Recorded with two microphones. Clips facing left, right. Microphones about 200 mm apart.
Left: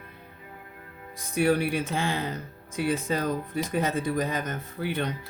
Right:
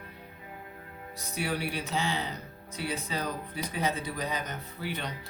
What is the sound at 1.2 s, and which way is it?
Speech, 50° left (ahead or behind).